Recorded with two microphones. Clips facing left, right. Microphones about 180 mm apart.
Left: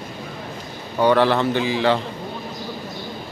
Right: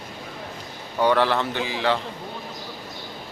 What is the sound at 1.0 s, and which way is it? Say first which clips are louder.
Speech: left 4 dB; 10° left (ahead or behind).